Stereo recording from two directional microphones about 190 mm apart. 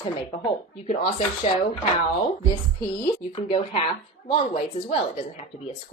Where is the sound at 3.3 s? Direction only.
30° left (ahead or behind).